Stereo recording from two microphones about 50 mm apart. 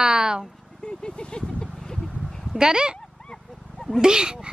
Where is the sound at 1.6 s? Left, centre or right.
Centre.